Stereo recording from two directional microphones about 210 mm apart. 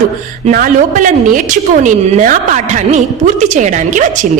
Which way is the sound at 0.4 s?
40° right (ahead or behind).